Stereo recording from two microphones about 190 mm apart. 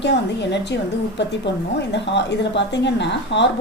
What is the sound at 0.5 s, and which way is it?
A woman's voice, 65° left (ahead or behind).